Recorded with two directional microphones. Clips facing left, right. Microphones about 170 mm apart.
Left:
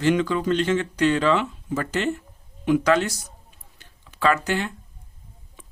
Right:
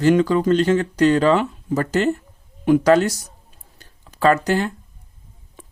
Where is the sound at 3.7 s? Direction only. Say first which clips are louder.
Right 5 dB; 40° right (ahead or behind).